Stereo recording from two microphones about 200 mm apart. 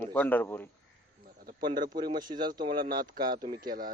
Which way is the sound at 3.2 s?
45° right (ahead or behind).